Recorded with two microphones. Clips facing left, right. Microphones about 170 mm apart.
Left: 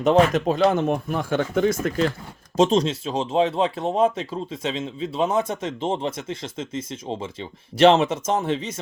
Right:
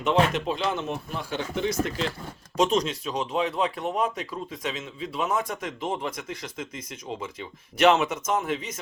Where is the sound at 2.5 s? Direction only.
30° left (ahead or behind).